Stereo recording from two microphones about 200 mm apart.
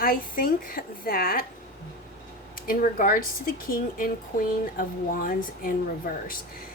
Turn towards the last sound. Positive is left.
turn(degrees=45)  # may be behind; listen again after turning